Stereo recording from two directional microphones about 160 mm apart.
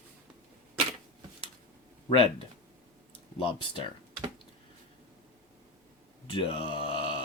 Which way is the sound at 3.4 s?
35° left (ahead or behind).